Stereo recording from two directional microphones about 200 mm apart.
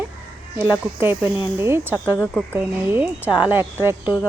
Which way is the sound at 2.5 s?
10° right (ahead or behind).